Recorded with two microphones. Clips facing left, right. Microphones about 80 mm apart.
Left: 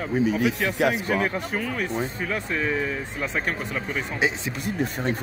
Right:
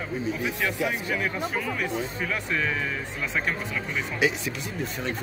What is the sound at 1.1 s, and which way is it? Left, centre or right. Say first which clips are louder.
Speech: left 3 dB; left.